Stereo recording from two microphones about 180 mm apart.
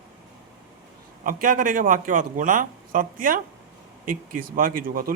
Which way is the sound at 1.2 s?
50° right (ahead or behind).